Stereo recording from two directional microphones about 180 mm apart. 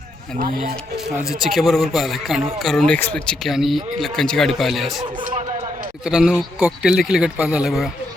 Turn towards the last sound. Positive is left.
turn(degrees=0)  # may be behind; listen again after turning